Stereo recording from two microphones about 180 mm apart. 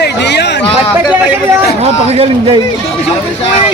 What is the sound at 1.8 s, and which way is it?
Speech, 35° right (ahead or behind).